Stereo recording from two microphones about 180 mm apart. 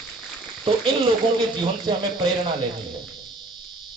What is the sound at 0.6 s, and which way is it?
Speech, 25° right (ahead or behind).